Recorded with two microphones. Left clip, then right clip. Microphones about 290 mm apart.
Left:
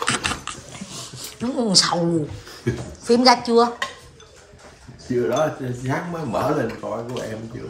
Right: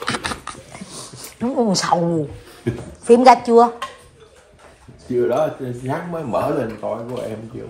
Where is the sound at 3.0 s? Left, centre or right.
Centre.